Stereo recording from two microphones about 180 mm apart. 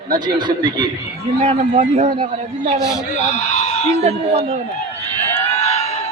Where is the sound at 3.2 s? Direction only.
40° left (ahead or behind).